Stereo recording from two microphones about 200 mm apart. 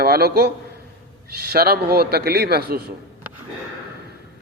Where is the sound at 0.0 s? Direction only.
50° right (ahead or behind).